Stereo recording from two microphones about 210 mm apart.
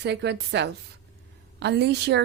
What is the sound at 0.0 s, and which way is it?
A woman's voice, 55° right (ahead or behind).